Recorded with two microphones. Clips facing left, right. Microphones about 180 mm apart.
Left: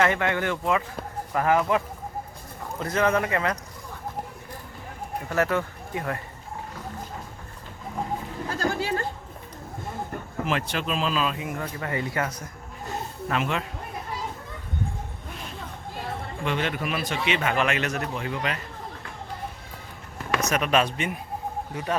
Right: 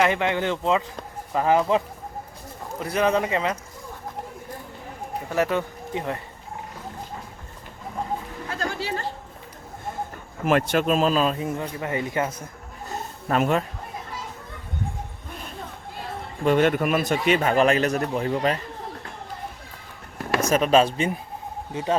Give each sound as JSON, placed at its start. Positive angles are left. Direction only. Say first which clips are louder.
{"t": 0.0, "sound": "speech", "louder": "right 2 dB", "side_deg": -20}
{"t": 5.3, "sound": "speech", "louder": "right 1 dB", "side_deg": -15}
{"t": 8.4, "sound": "a sound", "louder": "left 2 dB", "side_deg": 45}
{"t": 10.4, "sound": "speech", "louder": "right 8 dB", "side_deg": -50}
{"t": 11.5, "sound": "speech", "louder": "right 2 dB", "side_deg": -20}
{"t": 13.2, "sound": "speech", "louder": "right 6 dB", "side_deg": -40}
{"t": 16.4, "sound": "a man's voice", "louder": "right 9 dB", "side_deg": -45}
{"t": 20.5, "sound": "a man's voice", "louder": "right 6 dB", "side_deg": -30}